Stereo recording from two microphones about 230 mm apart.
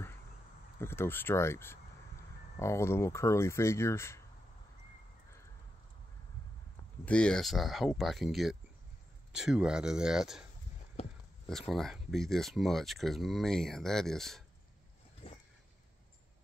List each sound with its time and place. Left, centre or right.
0.7 s speech: centre
7.1 s speech: centre
11.4 s speech: centre
15.2 s a sound: left